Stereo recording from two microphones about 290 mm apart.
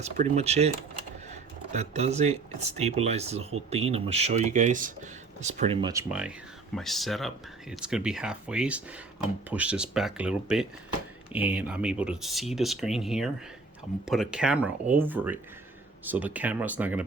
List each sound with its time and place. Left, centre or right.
0.0 s speech: right; by 17.0 s centre